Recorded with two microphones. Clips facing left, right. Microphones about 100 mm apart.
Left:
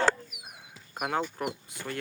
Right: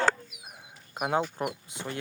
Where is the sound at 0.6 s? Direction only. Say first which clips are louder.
Right 2 dB; 20° right (ahead or behind).